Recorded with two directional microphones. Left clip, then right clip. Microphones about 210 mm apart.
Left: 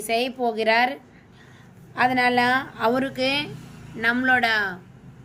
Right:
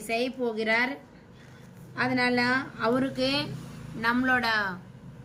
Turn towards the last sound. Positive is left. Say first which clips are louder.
# left 5 dB
turn(degrees=10)  # may be behind; listen again after turning